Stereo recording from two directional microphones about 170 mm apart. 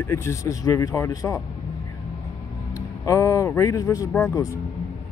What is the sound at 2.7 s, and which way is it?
Speech, 20° left (ahead or behind).